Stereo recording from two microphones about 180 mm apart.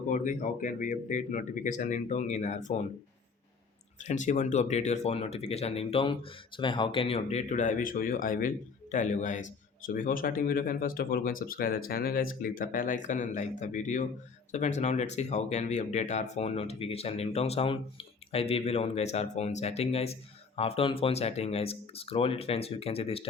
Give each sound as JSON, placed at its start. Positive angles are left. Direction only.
{"t": 0.1, "sound": "speech", "side_deg": 45}
{"t": 4.0, "sound": "speech", "side_deg": 40}